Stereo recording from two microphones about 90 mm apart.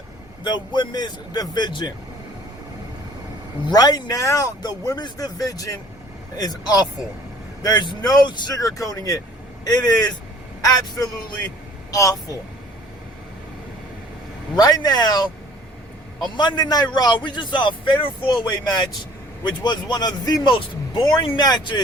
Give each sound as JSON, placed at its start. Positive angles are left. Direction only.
{"t": 0.4, "sound": "speech", "side_deg": 55}
{"t": 3.7, "sound": "speech", "side_deg": 45}
{"t": 11.9, "sound": "speech", "side_deg": 40}
{"t": 14.5, "sound": "a man's voice", "side_deg": 45}
{"t": 21.3, "sound": "speech", "side_deg": 50}